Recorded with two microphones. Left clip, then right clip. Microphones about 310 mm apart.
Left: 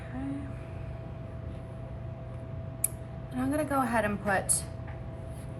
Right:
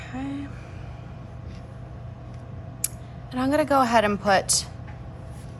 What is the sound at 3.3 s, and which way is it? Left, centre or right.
A woman's voice, centre.